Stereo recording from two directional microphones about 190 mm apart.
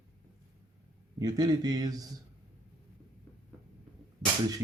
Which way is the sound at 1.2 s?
20° right (ahead or behind).